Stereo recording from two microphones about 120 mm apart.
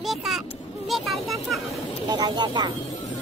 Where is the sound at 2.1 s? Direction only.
35° right (ahead or behind).